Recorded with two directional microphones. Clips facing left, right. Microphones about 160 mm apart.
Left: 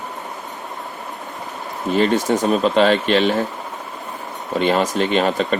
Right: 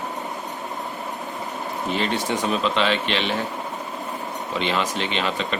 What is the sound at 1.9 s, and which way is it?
Speech, 45° left (ahead or behind).